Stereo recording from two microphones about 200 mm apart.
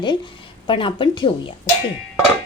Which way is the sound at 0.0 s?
25° left (ahead or behind).